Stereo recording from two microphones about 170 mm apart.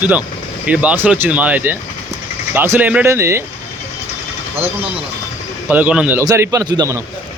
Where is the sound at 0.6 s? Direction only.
10° right (ahead or behind).